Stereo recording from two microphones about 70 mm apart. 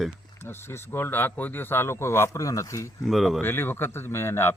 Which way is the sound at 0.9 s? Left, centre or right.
Left.